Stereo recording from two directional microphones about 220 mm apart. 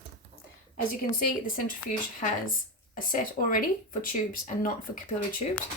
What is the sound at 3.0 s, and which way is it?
A woman's voice, 40° left (ahead or behind).